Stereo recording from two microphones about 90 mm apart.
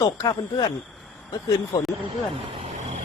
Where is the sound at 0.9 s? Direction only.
Centre (ahead or behind).